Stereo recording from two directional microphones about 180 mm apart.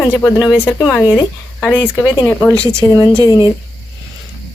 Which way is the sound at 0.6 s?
15° left (ahead or behind).